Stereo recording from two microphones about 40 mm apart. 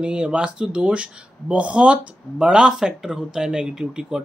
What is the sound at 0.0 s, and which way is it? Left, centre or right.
Speech, right.